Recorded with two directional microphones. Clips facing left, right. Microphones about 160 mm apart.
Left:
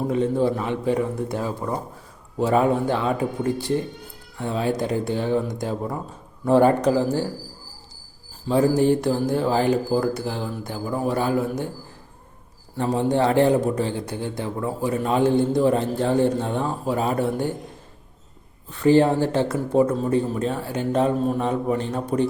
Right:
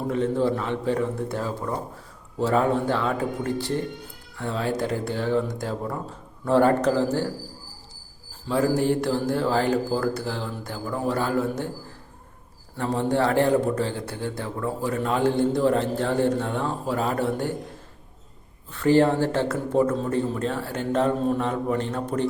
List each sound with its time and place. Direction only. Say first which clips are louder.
0.1 s a man's voice: even; 15° left (ahead or behind)
8.4 s a man's voice: left 4 dB; 20° left (ahead or behind)
12.7 s a man's voice: left 2 dB; 15° left (ahead or behind)
18.8 s a man's voice: left 2 dB; 15° left (ahead or behind)